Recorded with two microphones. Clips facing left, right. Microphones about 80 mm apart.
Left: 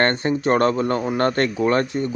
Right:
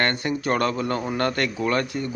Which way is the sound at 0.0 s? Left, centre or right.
Left.